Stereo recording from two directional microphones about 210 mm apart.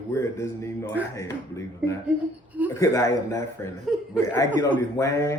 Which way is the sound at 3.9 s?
Centre (ahead or behind).